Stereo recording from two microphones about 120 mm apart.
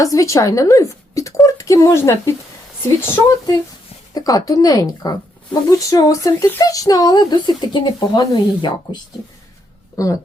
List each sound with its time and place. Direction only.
0.0 s speech: 25° left (ahead or behind)